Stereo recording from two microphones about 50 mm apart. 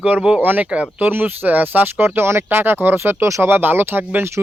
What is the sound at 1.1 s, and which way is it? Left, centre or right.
Speech, right.